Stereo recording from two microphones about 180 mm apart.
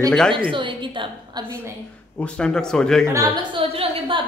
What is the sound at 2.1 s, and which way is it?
Speech, 5° left (ahead or behind).